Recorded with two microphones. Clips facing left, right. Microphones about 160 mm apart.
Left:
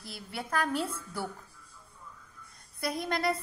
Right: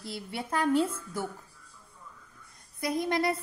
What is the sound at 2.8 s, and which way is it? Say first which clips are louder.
Speech: right 3 dB; 20° right (ahead or behind).